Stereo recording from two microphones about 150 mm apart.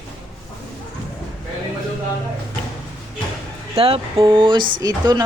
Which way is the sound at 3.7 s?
40° right (ahead or behind).